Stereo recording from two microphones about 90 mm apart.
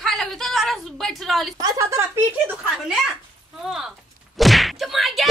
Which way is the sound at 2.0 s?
25° right (ahead or behind).